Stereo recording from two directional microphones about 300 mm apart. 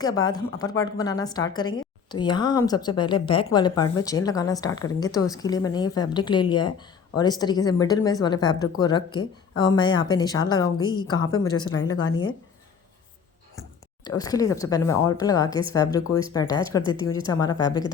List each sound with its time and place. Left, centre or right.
0.0 s a woman's voice: centre
12.0 s speech: left
14.2 s a woman's voice: centre
16.8 s speech: centre
17.4 s a woman's voice: centre